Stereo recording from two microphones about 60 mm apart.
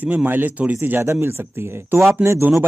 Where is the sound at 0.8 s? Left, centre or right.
Right.